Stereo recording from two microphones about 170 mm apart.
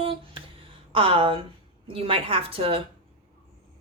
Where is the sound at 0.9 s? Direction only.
30° right (ahead or behind).